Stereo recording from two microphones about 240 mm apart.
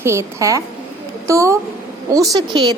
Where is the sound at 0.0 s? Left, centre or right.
Centre.